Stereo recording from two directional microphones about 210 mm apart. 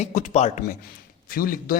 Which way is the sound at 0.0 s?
35° left (ahead or behind).